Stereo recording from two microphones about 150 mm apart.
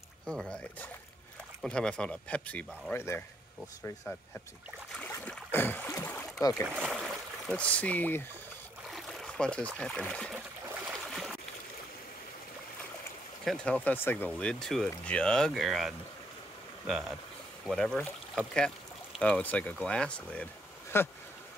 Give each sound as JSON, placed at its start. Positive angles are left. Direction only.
{"t": 0.3, "sound": "speech", "side_deg": 5}
{"t": 4.9, "sound": "boat", "side_deg": 5}
{"t": 6.7, "sound": "speech", "side_deg": -5}
{"t": 11.1, "sound": "a sound", "side_deg": 0}
{"t": 13.5, "sound": "speech", "side_deg": 10}
{"t": 17.6, "sound": "speech", "side_deg": 5}